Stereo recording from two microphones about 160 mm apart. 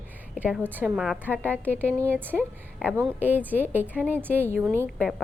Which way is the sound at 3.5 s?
10° right (ahead or behind).